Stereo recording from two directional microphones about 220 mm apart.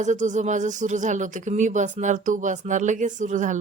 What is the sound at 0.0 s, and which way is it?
Speech, 35° right (ahead or behind).